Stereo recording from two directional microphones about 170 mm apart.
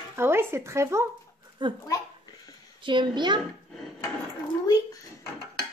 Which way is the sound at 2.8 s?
30° right (ahead or behind).